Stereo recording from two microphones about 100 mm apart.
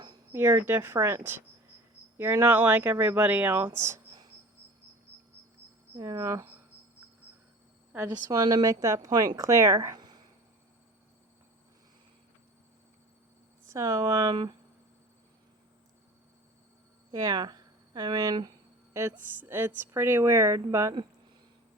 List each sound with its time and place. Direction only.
0.3 s a woman's voice: 25° right (ahead or behind)
6.0 s speech: 35° right (ahead or behind)
8.3 s speech: 35° right (ahead or behind)
13.7 s speech: 35° right (ahead or behind)
17.1 s speech: 40° right (ahead or behind)
18.9 s a woman's voice: 25° right (ahead or behind)